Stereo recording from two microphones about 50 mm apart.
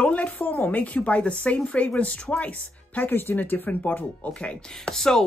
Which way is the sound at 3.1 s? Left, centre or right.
Left.